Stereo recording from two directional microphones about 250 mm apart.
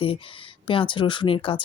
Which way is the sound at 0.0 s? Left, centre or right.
Left.